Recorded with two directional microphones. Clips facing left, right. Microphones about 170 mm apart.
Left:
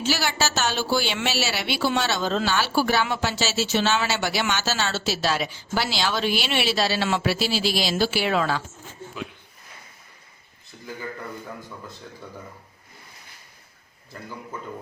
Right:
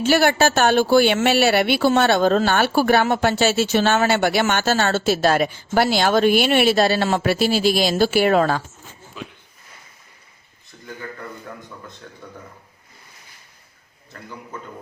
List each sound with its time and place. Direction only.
0.0 s speech: 55° right (ahead or behind)